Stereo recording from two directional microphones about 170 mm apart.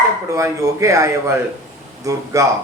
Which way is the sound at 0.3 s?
15° right (ahead or behind).